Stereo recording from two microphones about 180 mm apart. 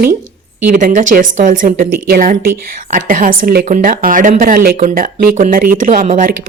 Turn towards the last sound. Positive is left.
turn(degrees=-45)  # may be behind; listen again after turning